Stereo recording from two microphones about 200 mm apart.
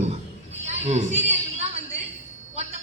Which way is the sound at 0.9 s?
35° right (ahead or behind).